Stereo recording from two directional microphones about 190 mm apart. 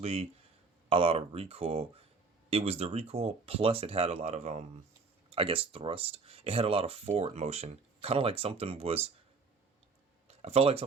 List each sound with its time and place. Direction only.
0.0 s speech: 30° right (ahead or behind)
10.2 s speech: 35° right (ahead or behind)